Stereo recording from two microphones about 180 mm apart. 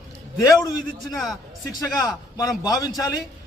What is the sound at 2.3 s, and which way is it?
Speech, 20° left (ahead or behind).